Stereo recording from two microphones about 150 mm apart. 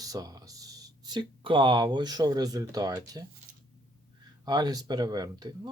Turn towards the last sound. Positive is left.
turn(degrees=-25)  # may be behind; listen again after turning